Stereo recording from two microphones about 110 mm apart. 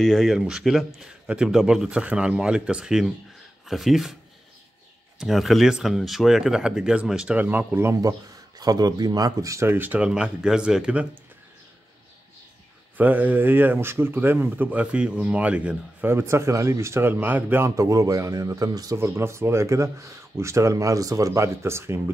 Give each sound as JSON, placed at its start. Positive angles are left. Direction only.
{"t": 0.0, "sound": "speech", "side_deg": 5}
{"t": 5.2, "sound": "speech", "side_deg": 0}
{"t": 8.5, "sound": "speech", "side_deg": -35}
{"t": 12.9, "sound": "speech", "side_deg": -15}
{"t": 17.6, "sound": "speech", "side_deg": -30}